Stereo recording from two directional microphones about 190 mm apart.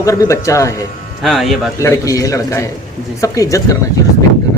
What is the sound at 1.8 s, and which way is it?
Speech, 15° left (ahead or behind).